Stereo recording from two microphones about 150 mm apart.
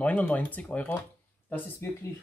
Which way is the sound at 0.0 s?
10° left (ahead or behind).